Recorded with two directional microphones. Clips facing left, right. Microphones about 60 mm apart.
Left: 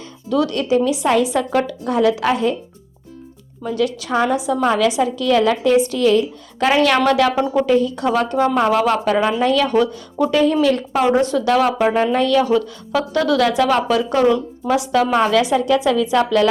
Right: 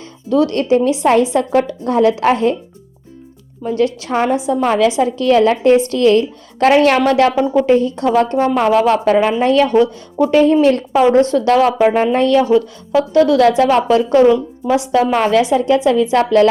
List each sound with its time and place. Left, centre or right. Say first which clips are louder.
0.3 s speech: right 4 dB; right
3.7 s speech: right 3 dB; right
5.9 s a woman's voice: right 3 dB; right
7.0 s speech: right 3 dB; right
9.4 s speech: right 4 dB; right
9.7 s speech: right 4 dB; right
11.8 s speech: right 3 dB; right
12.2 s a woman's voice: right 4 dB; right
13.1 s speech: right 5 dB; right
14.3 s a woman's voice: right 4 dB; centre
14.8 s speech: right 2 dB; right